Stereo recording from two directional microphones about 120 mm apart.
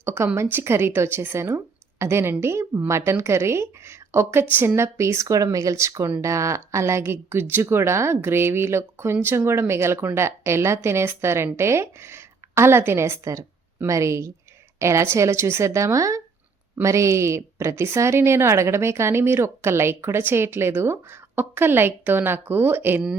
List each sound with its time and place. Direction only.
0.0 s speech: 20° right (ahead or behind)